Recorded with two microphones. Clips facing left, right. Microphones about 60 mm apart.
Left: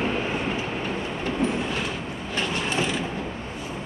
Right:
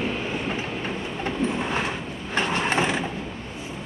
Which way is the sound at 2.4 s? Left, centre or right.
Right.